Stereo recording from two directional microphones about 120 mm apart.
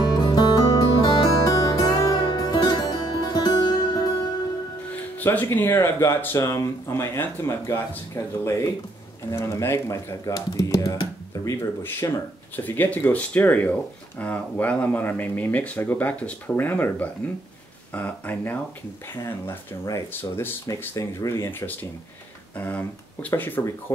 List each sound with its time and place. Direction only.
0.0 s music: 35° left (ahead or behind)
4.9 s speech: 15° left (ahead or behind)
9.3 s speech: 25° left (ahead or behind)